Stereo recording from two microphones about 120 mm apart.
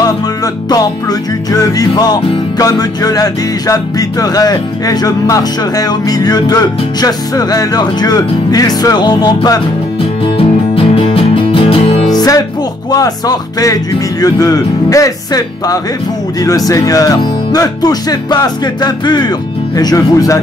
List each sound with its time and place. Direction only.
1.5 s speech: 30° left (ahead or behind)
2.6 s music: 30° left (ahead or behind)
10.3 s music: 50° left (ahead or behind)
12.1 s music: 35° left (ahead or behind)
12.9 s speech: 30° left (ahead or behind)
16.4 s music: 30° left (ahead or behind)